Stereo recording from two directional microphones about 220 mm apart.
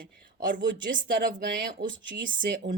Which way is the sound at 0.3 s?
40° right (ahead or behind).